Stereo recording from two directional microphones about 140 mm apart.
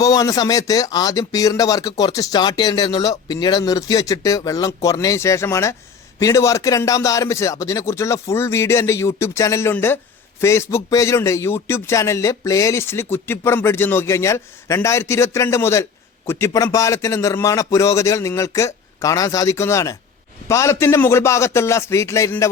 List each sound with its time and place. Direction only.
0.0 s speech: 25° left (ahead or behind)